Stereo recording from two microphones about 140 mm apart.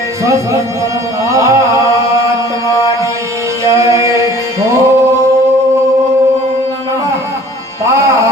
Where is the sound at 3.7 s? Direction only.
20° right (ahead or behind).